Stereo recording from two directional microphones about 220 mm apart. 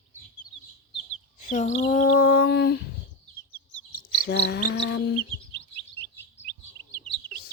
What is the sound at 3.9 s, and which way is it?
Speech, 45° left (ahead or behind).